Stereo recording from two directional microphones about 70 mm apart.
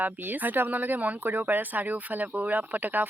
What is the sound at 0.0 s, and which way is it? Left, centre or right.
Speech, right.